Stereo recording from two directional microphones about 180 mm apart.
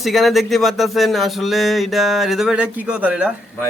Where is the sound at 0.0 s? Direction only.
Centre (ahead or behind).